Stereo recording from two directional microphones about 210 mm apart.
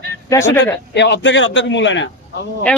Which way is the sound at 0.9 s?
55° left (ahead or behind).